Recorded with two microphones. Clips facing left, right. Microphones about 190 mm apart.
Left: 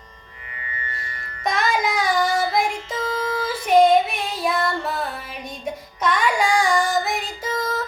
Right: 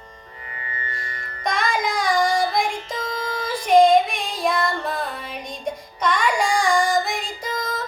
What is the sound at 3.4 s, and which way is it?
Music, 5° left (ahead or behind).